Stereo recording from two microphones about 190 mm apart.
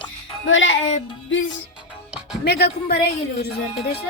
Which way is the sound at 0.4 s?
85° left.